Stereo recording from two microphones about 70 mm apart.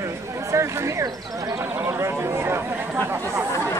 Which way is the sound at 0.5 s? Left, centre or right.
Right.